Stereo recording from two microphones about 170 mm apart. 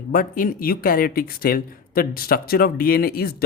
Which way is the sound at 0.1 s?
55° left (ahead or behind).